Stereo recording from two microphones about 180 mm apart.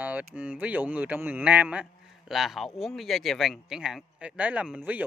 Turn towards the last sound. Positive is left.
turn(degrees=-5)  # may be behind; listen again after turning